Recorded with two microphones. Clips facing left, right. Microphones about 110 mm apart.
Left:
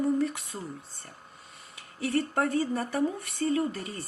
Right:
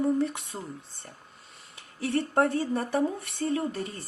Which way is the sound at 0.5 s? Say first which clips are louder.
Even; 20° right (ahead or behind).